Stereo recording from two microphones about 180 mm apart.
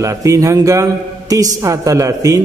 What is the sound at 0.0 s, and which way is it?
A man's voice, 15° right (ahead or behind).